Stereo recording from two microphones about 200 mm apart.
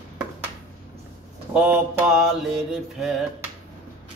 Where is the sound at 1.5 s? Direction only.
5° right (ahead or behind).